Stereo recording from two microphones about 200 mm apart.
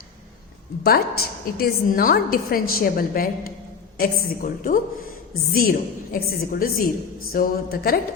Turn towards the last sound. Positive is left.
turn(degrees=45)  # may be behind; listen again after turning